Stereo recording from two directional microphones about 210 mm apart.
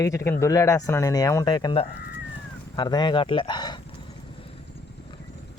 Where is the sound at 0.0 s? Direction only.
15° left (ahead or behind).